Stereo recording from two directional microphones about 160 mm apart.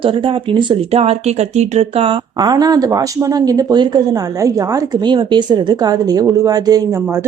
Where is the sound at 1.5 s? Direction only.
45° right (ahead or behind).